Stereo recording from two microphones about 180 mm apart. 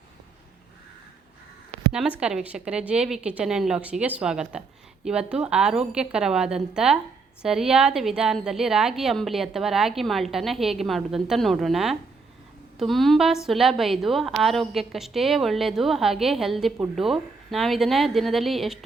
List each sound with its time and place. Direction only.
1.9 s a woman's voice: 5° right (ahead or behind)